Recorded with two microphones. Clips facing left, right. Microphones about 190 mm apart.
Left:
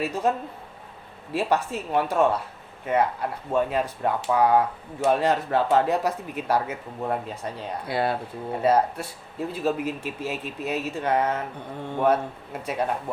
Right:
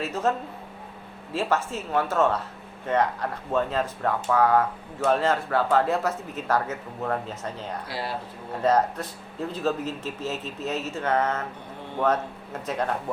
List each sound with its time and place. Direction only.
0.0 s speech: 15° left (ahead or behind)
7.9 s speech: 55° left (ahead or behind)
8.6 s speech: 10° left (ahead or behind)